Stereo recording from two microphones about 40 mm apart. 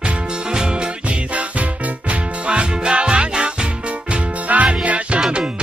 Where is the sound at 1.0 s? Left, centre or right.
Right.